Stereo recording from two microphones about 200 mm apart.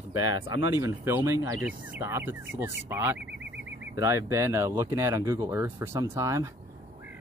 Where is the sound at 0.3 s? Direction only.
65° left (ahead or behind).